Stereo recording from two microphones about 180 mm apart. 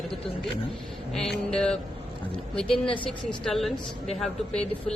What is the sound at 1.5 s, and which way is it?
A woman's voice, 5° left (ahead or behind).